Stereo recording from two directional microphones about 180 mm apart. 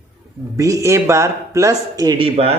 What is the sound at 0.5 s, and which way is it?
Speech, 15° right (ahead or behind).